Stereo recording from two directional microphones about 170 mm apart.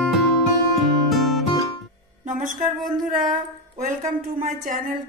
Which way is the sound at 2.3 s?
50° right (ahead or behind).